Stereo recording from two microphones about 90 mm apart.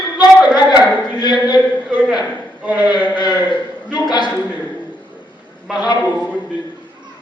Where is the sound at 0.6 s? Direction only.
55° left (ahead or behind).